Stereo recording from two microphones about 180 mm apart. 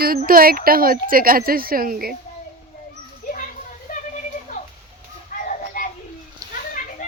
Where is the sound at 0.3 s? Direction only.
55° right (ahead or behind).